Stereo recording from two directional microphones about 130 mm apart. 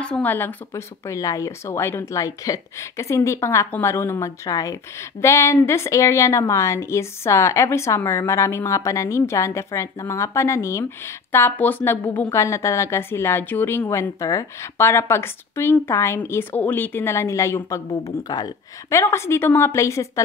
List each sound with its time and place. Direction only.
0.0 s a woman's voice: 10° left (ahead or behind)